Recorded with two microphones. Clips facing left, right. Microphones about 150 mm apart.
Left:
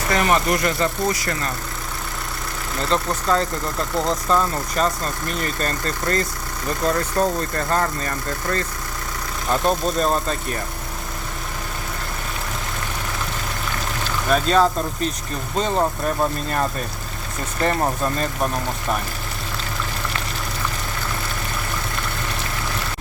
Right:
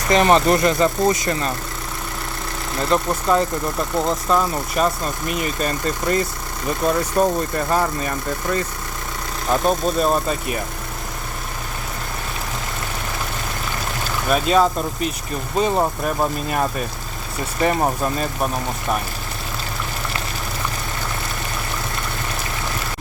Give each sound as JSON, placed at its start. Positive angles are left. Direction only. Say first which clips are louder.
{"t": 0.1, "sound": "speech", "louder": "right 5 dB", "side_deg": -25}
{"t": 2.9, "sound": "speech", "louder": "right 2 dB", "side_deg": -15}
{"t": 14.3, "sound": "speech", "louder": "right 1 dB", "side_deg": -5}